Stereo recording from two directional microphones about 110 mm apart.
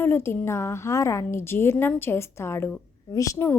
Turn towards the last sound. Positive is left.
turn(degrees=30)  # may be behind; listen again after turning